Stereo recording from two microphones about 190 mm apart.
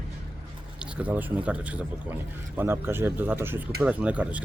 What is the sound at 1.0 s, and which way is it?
Speech, 10° right (ahead or behind).